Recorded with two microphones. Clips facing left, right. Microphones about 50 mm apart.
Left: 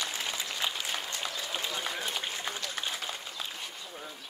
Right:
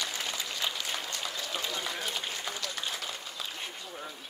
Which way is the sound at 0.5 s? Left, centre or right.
Centre.